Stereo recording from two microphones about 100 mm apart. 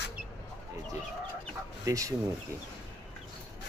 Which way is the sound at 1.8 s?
35° right (ahead or behind).